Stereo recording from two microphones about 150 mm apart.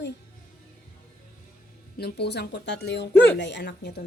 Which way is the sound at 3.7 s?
90° left.